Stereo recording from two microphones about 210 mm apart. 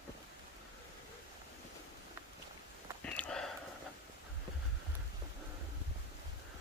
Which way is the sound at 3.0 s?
5° left (ahead or behind).